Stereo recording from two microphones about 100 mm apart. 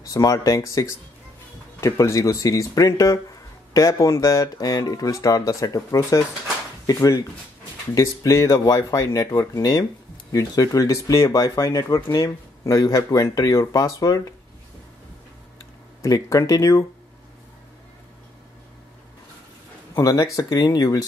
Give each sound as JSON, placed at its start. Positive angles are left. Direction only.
{"t": 0.0, "sound": "speech", "side_deg": 35}
{"t": 16.0, "sound": "speech", "side_deg": 35}
{"t": 20.0, "sound": "speech", "side_deg": 35}